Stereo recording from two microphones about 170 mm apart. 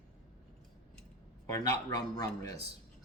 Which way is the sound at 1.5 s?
20° left (ahead or behind).